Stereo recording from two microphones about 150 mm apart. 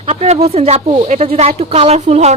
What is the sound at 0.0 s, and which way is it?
A woman's voice, 45° right (ahead or behind).